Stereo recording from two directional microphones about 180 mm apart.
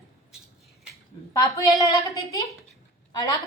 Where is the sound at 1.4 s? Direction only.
20° left (ahead or behind).